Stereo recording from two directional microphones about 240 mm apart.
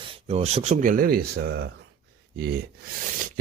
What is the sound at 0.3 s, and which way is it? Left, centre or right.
Speech, right.